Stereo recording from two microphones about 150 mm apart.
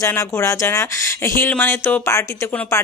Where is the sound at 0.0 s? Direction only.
20° left (ahead or behind).